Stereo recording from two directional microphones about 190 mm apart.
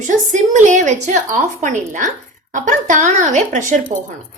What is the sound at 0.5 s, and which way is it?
A woman's voice, 40° right (ahead or behind).